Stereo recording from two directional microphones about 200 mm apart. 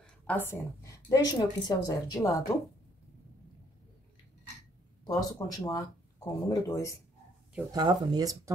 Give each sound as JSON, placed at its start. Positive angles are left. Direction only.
{"t": 0.3, "sound": "a woman's voice", "side_deg": 10}
{"t": 5.0, "sound": "a woman's voice", "side_deg": 20}
{"t": 7.7, "sound": "speech", "side_deg": -20}